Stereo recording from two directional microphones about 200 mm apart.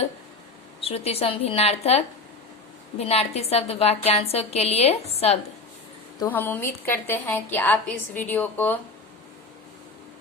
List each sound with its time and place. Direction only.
0.8 s a woman's voice: 30° left (ahead or behind)
6.1 s a woman's voice: 10° left (ahead or behind)